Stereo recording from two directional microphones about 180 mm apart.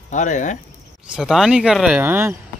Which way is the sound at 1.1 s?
5° right (ahead or behind).